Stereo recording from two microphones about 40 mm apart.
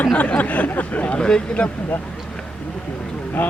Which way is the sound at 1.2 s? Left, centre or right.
Centre.